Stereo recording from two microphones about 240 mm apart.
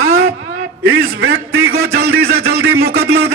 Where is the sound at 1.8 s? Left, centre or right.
Right.